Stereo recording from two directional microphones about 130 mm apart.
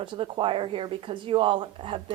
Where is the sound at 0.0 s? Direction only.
40° right (ahead or behind).